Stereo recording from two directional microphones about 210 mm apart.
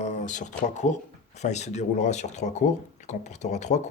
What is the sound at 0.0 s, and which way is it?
Speech, 35° left (ahead or behind).